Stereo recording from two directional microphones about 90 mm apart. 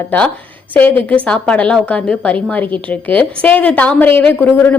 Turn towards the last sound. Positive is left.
turn(degrees=20)  # may be behind; listen again after turning